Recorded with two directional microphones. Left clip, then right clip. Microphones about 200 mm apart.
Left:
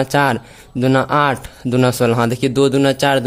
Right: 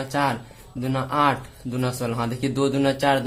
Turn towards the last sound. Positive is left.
turn(degrees=45)  # may be behind; listen again after turning